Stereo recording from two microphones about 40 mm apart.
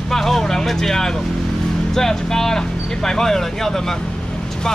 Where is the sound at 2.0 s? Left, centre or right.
Centre.